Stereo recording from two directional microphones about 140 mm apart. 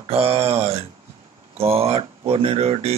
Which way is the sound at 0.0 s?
45° right (ahead or behind).